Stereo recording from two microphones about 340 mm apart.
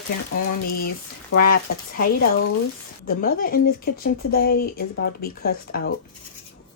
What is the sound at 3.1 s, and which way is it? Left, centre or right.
Speech, left.